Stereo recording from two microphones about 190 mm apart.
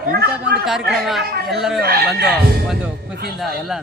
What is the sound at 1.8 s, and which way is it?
Speech, 55° right (ahead or behind).